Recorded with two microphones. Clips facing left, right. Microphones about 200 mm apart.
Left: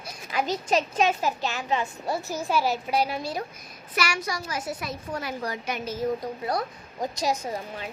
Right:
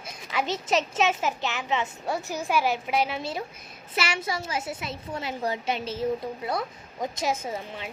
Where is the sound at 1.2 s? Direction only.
20° right (ahead or behind).